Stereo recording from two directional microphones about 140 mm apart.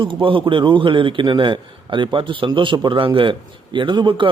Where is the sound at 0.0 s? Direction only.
35° right (ahead or behind).